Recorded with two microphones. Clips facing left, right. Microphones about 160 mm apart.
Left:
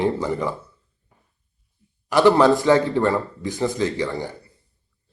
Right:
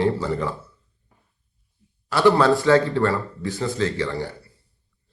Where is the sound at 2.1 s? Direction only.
15° left (ahead or behind).